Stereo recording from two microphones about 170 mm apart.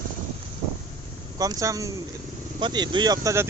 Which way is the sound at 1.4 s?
20° right (ahead or behind).